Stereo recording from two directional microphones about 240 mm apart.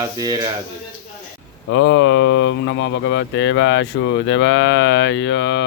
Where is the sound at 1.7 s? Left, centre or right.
Left.